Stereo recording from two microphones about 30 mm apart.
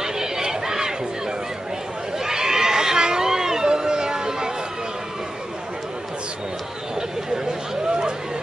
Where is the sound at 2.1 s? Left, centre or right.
Right.